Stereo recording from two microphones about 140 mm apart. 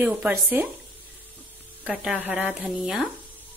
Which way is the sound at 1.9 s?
10° right (ahead or behind).